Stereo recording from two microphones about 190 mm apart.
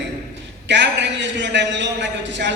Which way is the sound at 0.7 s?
70° right (ahead or behind).